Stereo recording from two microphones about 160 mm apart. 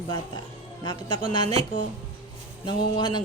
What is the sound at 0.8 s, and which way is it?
Speech, 25° left (ahead or behind).